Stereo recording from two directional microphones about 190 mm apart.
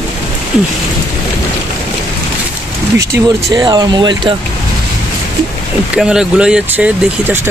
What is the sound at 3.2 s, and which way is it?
Speech, 20° right (ahead or behind).